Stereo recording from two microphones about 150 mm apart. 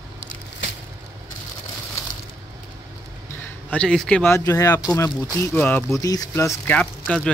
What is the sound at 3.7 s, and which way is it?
Speech, 5° left (ahead or behind).